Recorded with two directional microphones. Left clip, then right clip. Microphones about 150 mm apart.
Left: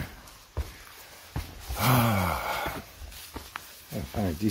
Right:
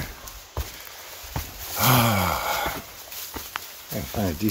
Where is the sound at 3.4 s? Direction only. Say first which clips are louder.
Right 5 dB; 15° right (ahead or behind).